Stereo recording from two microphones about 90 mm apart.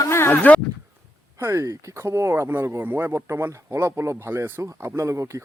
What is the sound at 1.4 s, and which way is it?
Speech, 30° right (ahead or behind).